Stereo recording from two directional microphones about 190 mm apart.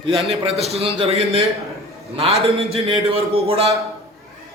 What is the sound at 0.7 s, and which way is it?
A man's voice, 30° right (ahead or behind).